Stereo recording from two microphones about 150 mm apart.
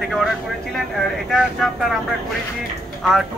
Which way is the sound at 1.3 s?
Centre (ahead or behind).